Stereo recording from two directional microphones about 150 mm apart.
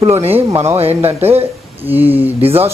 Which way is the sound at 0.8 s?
40° right (ahead or behind).